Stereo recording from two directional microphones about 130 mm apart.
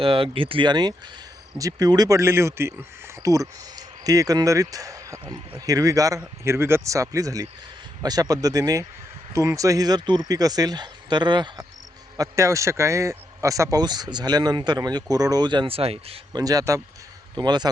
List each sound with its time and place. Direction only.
0.0 s a man's voice: 45° right (ahead or behind); by 5.2 s 25° right (ahead or behind)
5.2 s speech: 45° right (ahead or behind)
5.5 s a man's voice: 30° right (ahead or behind); by 16.2 s 50° right (ahead or behind)
16.3 s a man's voice: 30° right (ahead or behind)